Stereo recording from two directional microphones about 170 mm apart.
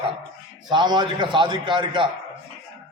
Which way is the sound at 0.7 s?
25° right (ahead or behind).